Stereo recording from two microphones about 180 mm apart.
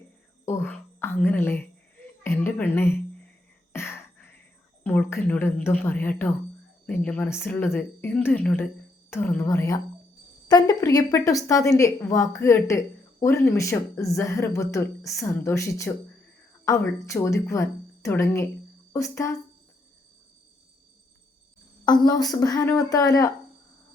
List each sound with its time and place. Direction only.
0.4 s whispering: 10° left (ahead or behind)
1.2 s a woman's voice: 10° left (ahead or behind)
3.7 s a sound: 15° left (ahead or behind)
4.8 s a woman's voice: 10° left (ahead or behind)
21.8 s speech: 20° left (ahead or behind)